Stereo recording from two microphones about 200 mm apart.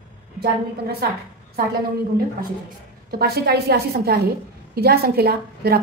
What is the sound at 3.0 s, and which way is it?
A woman's voice, 50° right (ahead or behind).